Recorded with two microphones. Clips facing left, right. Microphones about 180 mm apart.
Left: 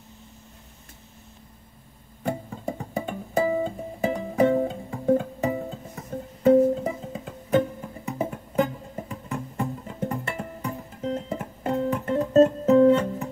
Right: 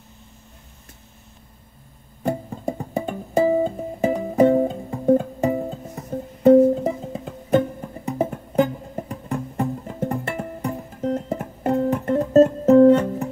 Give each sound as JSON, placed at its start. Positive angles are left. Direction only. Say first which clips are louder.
{"t": 2.2, "sound": "music", "louder": "right 4 dB", "side_deg": -45}